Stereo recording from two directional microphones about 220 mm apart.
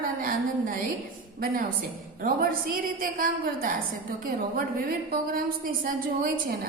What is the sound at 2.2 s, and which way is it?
A woman's voice, 40° right (ahead or behind).